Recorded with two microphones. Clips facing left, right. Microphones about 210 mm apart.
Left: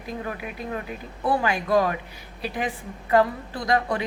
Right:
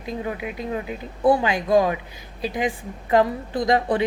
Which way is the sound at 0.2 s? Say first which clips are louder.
Right 4 dB; 20° right (ahead or behind).